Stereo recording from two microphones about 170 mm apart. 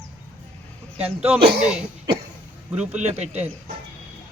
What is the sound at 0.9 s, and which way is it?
Speech, 35° right (ahead or behind).